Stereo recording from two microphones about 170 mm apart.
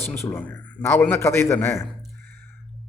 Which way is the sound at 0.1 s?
10° left (ahead or behind).